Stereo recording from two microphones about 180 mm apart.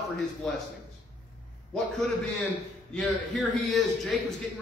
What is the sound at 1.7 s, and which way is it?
Speech, 5° left (ahead or behind).